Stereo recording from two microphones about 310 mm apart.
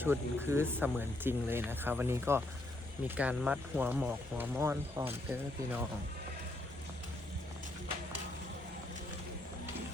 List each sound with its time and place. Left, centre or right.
0.0 s speech: centre